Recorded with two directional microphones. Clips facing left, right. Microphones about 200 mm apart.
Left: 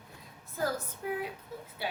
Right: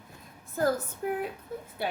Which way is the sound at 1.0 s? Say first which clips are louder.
Right 4 dB; 55° right (ahead or behind).